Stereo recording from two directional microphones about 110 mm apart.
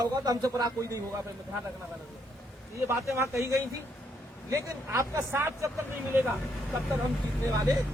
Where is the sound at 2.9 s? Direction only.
25° right (ahead or behind).